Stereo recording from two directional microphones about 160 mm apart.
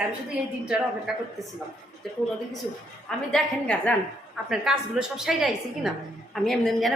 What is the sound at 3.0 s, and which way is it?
Speech, 5° left (ahead or behind).